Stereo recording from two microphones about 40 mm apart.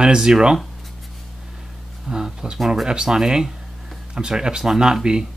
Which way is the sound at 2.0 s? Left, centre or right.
Centre.